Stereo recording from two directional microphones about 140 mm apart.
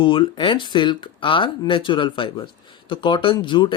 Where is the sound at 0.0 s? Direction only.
35° left (ahead or behind).